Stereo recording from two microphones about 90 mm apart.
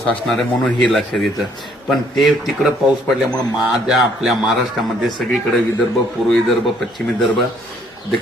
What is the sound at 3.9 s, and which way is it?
Speech, 5° right (ahead or behind).